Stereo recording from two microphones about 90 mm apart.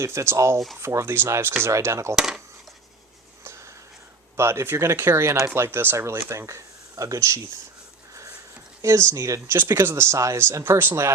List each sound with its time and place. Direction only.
0.0 s speech: 30° right (ahead or behind)
2.1 s speech: 5° right (ahead or behind)
3.4 s a sound: 30° right (ahead or behind)
4.4 s speech: 30° right (ahead or behind)
8.8 s speech: 30° right (ahead or behind)